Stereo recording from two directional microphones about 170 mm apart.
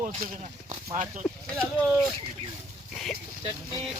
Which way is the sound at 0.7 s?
45° right (ahead or behind).